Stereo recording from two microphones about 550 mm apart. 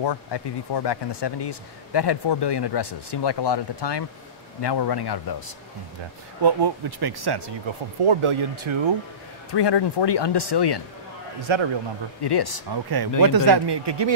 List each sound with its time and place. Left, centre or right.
0.0 s speech: left
6.4 s speech: right
9.5 s speech: left
11.4 s a man's voice: right
12.2 s speech: left
12.7 s speech: right